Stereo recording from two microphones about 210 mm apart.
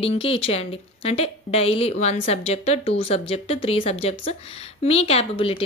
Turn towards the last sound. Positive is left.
turn(degrees=25)  # may be behind; listen again after turning